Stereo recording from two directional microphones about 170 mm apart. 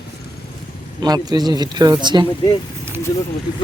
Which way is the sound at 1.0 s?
25° right (ahead or behind).